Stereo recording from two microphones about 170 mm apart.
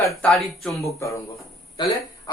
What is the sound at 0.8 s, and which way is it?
Speech, 20° left (ahead or behind).